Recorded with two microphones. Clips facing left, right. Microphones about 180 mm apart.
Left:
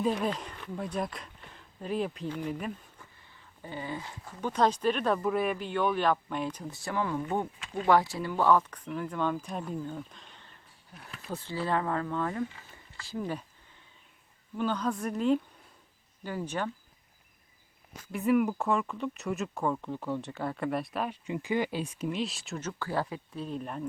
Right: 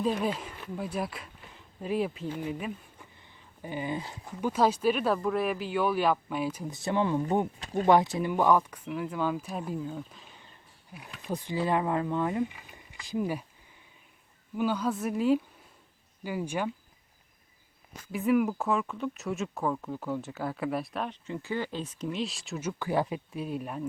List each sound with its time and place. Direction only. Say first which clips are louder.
0.0 s speech: even; centre (ahead or behind)
3.2 s a sound: right 4 dB; 15° right (ahead or behind)
4.0 s speech: right 3 dB; 20° right (ahead or behind)
4.4 s speech: right 1 dB; 5° right (ahead or behind)
6.7 s speech: right 5 dB; 20° right (ahead or behind)
7.6 s speech: right 5 dB; 40° right (ahead or behind)
7.9 s speech: right 2 dB; 20° right (ahead or behind); by 11.3 s 5° right (ahead or behind)
11.3 s speech: right 3 dB; 15° right (ahead or behind)
14.5 s speech: right 2 dB; 10° right (ahead or behind)
18.1 s speech: even; centre (ahead or behind)
21.2 s speech: left 3 dB; 15° left (ahead or behind)
22.6 s speech: right 4 dB; 15° right (ahead or behind)